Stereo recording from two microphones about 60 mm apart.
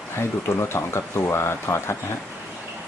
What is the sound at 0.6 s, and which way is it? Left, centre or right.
Speech, left.